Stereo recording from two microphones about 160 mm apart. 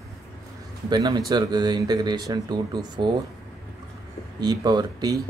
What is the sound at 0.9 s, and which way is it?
Speech, 25° right (ahead or behind).